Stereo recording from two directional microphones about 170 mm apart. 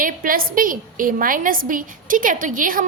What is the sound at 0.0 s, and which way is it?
A woman's voice, 55° right (ahead or behind).